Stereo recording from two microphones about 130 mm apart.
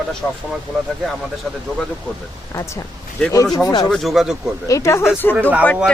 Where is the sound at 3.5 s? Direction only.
25° left (ahead or behind).